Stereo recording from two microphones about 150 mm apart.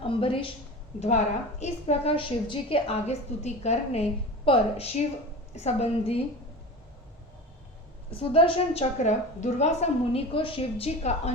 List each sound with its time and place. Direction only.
0.0 s a sound: 35° left (ahead or behind)
0.9 s a woman's voice: 50° left (ahead or behind)
8.1 s a woman's voice: 40° left (ahead or behind)